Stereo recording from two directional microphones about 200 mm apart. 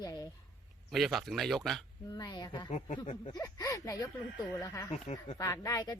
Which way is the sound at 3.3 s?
20° left (ahead or behind).